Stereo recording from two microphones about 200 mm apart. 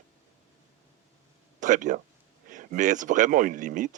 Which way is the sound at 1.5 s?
40° right (ahead or behind).